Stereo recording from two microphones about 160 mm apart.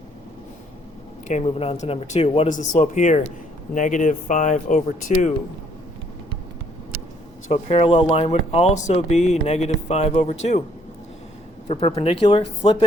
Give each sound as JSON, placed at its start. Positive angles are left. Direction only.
{"t": 1.3, "sound": "speech", "side_deg": 45}
{"t": 7.4, "sound": "speech", "side_deg": 40}
{"t": 11.7, "sound": "speech", "side_deg": 35}